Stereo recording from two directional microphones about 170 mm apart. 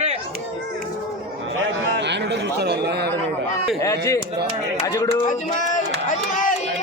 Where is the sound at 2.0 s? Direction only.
90° right; by 3.1 s 75° right (ahead or behind).